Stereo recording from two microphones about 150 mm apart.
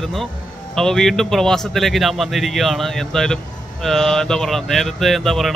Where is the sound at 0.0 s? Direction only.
Centre (ahead or behind).